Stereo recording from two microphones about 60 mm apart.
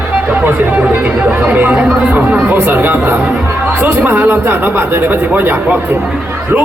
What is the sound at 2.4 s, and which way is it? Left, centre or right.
Speech, right.